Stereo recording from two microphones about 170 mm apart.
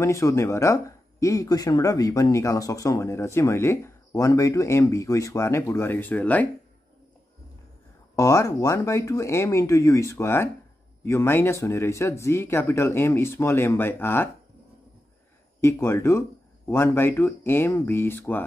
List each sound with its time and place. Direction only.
0.0 s speech: 15° left (ahead or behind)
8.2 s speech: 20° left (ahead or behind)
15.6 s speech: 15° left (ahead or behind)